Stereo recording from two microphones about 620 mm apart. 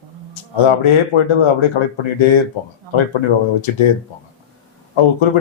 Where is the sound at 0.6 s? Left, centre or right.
Left.